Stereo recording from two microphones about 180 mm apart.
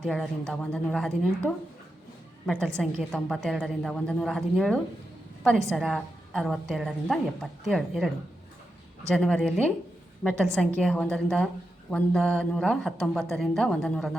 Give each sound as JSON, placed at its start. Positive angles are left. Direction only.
{"t": 0.0, "sound": "a woman's voice", "side_deg": 5}